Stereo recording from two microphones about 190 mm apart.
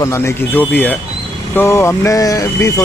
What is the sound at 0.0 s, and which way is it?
Speech, 15° left (ahead or behind).